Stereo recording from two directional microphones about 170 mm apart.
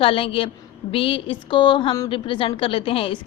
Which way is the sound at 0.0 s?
30° left (ahead or behind).